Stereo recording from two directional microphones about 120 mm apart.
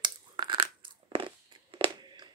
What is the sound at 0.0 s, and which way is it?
Crunch, 40° right (ahead or behind).